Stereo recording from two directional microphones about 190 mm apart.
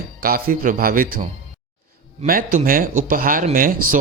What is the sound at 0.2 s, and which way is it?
A man's voice, 50° right (ahead or behind).